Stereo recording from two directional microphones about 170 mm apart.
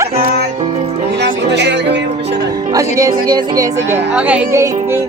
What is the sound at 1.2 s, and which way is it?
Music, 90° right.